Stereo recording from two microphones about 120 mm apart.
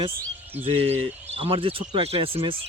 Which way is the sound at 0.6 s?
50° right (ahead or behind).